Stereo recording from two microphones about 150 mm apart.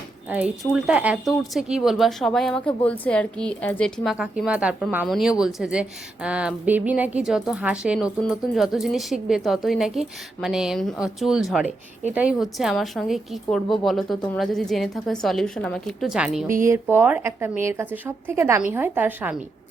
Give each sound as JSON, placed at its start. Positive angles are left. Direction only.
{"t": 0.3, "sound": "a woman's voice", "side_deg": -10}
{"t": 16.5, "sound": "a woman's voice", "side_deg": -20}